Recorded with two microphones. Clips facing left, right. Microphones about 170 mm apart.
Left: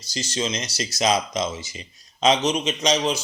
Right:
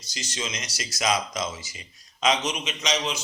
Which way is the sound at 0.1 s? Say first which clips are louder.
Left 7 dB; 30° left (ahead or behind).